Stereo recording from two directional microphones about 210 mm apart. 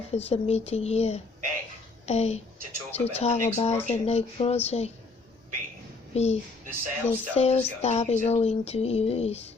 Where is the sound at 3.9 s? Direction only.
30° left (ahead or behind).